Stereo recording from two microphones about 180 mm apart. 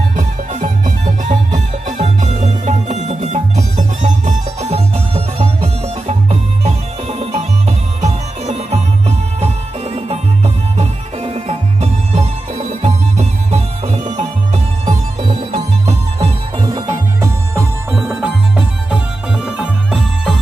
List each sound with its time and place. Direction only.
0.1 s music: 40° right (ahead or behind)
16.6 s music: 25° right (ahead or behind); by 20.3 s centre (ahead or behind)